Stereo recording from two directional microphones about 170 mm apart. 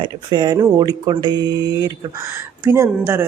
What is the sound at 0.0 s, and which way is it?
Speech, 25° right (ahead or behind).